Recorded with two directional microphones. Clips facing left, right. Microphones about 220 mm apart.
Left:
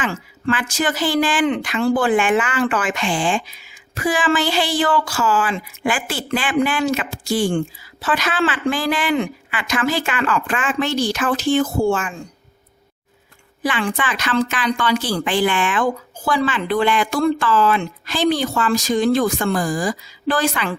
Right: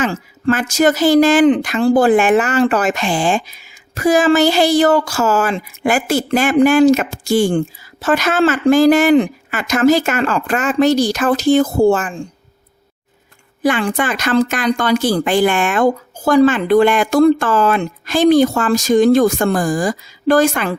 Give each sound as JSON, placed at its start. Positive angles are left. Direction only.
{"t": 0.0, "sound": "speech", "side_deg": -40}
{"t": 13.6, "sound": "speech", "side_deg": -45}